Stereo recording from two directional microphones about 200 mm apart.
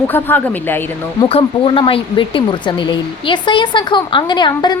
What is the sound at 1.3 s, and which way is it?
Speech, 25° left (ahead or behind).